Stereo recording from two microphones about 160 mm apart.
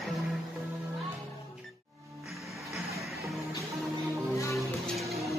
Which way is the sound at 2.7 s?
Centre (ahead or behind).